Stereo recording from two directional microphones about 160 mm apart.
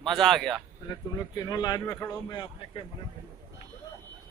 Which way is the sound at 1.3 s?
25° left (ahead or behind).